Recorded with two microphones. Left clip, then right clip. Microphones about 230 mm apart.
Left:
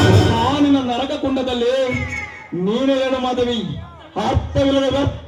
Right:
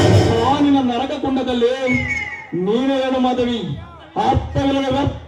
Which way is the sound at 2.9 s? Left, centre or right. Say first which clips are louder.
Even; left.